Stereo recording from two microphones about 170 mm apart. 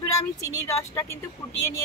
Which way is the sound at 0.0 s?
15° left (ahead or behind).